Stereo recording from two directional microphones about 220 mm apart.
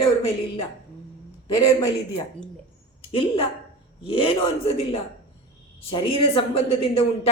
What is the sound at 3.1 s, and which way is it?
A man's voice, 25° left (ahead or behind).